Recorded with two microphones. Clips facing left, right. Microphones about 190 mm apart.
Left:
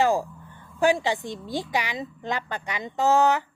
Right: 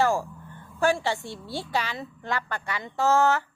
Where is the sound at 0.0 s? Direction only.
15° left (ahead or behind).